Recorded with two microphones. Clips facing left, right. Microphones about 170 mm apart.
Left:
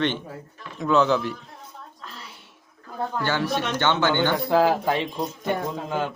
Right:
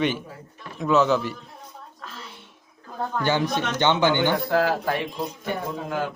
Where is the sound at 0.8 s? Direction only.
Centre (ahead or behind).